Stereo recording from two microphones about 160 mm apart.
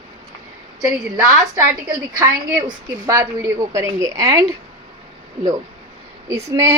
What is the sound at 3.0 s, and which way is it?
A woman's voice, 20° right (ahead or behind).